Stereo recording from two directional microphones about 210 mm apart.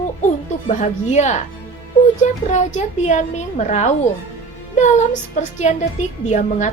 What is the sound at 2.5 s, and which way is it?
A woman's voice, 35° left (ahead or behind).